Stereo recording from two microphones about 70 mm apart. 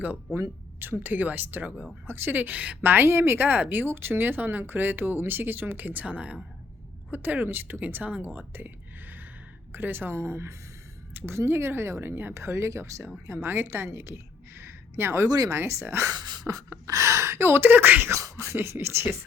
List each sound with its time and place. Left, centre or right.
0.8 s a woman's voice: right
11.1 s a sound: right
11.3 s speech: right
13.2 s speech: right
13.7 s a sound: right
15.3 s speech: right
15.5 s speech: right
16.1 s beatboxing: right
16.5 s speech: right
18.1 s speech: right